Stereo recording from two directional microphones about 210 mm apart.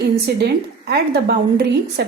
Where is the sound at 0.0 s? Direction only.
50° right (ahead or behind).